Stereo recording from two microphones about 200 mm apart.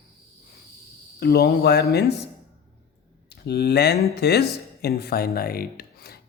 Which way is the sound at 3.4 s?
55° left (ahead or behind).